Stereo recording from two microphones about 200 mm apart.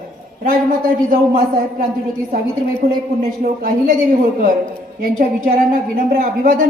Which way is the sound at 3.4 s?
45° right (ahead or behind).